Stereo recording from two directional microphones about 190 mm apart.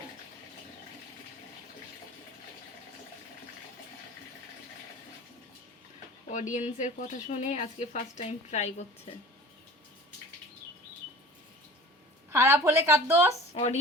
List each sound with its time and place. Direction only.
6.3 s speech: 40° left (ahead or behind)
12.3 s a woman's voice: 15° right (ahead or behind)
13.5 s speech: 35° left (ahead or behind)